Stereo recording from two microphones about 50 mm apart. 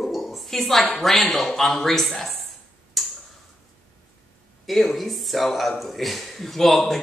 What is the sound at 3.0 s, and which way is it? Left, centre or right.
Tick-tock, centre.